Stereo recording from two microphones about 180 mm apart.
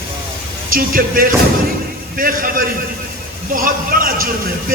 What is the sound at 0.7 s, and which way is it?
A man's voice, 50° right (ahead or behind).